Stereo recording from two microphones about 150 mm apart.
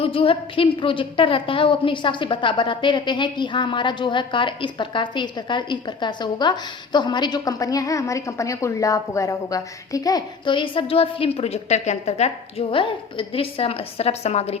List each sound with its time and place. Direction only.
0.0 s a woman's voice: 40° left (ahead or behind)